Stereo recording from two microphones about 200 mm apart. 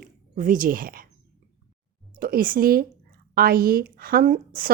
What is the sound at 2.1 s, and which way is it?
A woman's voice, 45° right (ahead or behind).